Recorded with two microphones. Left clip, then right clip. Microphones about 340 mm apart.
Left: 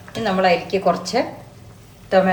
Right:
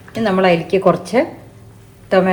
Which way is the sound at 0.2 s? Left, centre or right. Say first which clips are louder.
Right 3 dB; centre.